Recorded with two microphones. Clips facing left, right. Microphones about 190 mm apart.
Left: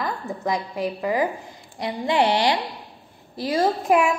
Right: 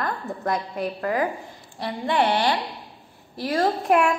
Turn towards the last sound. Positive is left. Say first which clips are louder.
# left 1 dB
turn(degrees=0)  # may be behind; listen again after turning